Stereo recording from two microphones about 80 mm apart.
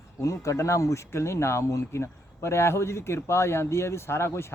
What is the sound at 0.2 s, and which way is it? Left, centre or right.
Speech, left.